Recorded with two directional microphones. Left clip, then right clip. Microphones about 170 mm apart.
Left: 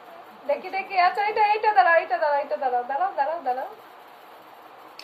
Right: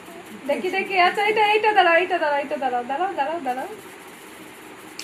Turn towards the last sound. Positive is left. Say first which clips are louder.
# right 1 dB
turn(degrees=0)  # may be behind; listen again after turning